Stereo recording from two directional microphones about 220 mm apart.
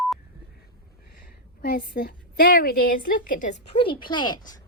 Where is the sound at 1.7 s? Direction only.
40° left (ahead or behind).